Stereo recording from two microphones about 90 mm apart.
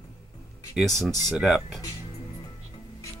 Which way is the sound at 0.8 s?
Centre (ahead or behind).